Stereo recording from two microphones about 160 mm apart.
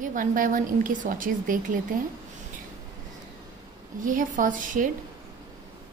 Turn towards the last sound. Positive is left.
turn(degrees=-55)  # may be behind; listen again after turning